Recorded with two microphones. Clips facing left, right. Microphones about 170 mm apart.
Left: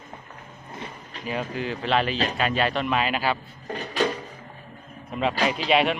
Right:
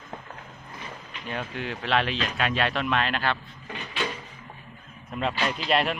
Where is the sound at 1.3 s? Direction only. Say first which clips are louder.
Left 4 dB; centre (ahead or behind).